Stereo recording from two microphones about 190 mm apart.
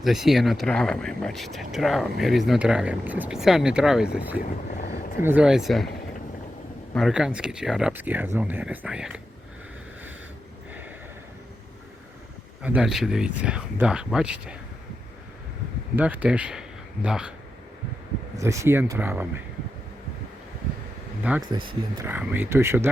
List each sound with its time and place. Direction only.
0.0 s speech: centre (ahead or behind)
4.4 s speech: 40° left (ahead or behind)
5.2 s speech: 5° right (ahead or behind)
6.9 s speech: centre (ahead or behind)
12.6 s speech: 5° right (ahead or behind)
16.0 s speech: 5° right (ahead or behind)
18.3 s speech: 15° right (ahead or behind)
21.5 s speech: 25° right (ahead or behind)
22.0 s speech: 10° right (ahead or behind)